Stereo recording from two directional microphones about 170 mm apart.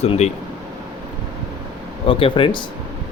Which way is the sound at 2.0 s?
30° left (ahead or behind).